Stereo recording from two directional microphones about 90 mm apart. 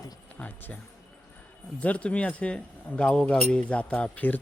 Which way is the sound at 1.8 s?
15° left (ahead or behind).